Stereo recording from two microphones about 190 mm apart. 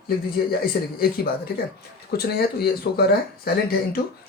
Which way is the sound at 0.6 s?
50° left (ahead or behind).